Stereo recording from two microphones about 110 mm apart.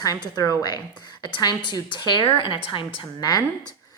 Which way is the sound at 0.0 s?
35° left (ahead or behind).